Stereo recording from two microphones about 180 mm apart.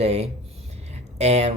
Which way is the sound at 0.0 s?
35° right (ahead or behind).